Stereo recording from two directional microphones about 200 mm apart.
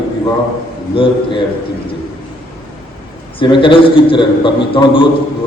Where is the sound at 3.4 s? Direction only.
25° left (ahead or behind).